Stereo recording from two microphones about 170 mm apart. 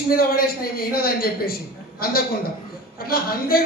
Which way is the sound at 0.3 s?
60° left (ahead or behind).